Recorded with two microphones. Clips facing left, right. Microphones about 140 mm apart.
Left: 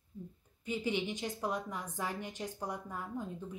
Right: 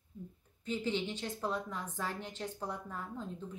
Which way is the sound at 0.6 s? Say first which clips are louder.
Even; 15° left (ahead or behind).